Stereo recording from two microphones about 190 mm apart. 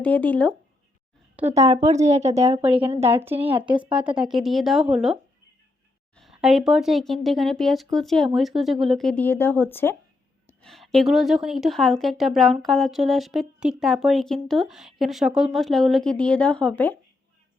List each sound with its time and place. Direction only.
0.0 s speech: 10° left (ahead or behind)
1.4 s speech: 15° right (ahead or behind)
1.9 s speech: 35° right (ahead or behind)
3.2 s speech: 10° right (ahead or behind)
6.1 s speech: centre (ahead or behind)